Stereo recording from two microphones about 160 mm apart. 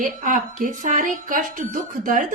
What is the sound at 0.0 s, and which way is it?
Speech, 55° right (ahead or behind).